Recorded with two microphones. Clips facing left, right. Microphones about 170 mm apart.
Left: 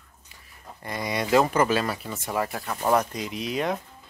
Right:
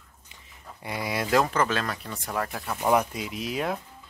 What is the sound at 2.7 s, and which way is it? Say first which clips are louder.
Speech: even; 10° right (ahead or behind).